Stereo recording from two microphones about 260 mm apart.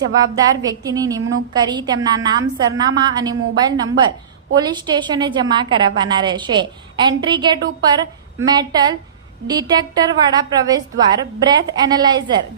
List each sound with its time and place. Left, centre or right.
0.6 s a woman's voice: centre